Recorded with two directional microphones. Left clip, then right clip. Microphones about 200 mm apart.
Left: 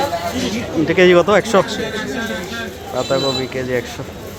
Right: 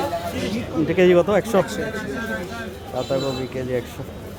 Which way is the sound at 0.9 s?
5° right (ahead or behind).